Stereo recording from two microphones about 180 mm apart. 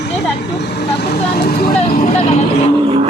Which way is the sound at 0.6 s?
65° left (ahead or behind).